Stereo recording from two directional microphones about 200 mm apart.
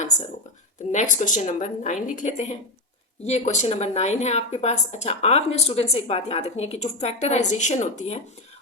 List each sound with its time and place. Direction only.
0.9 s a woman's voice: 40° left (ahead or behind)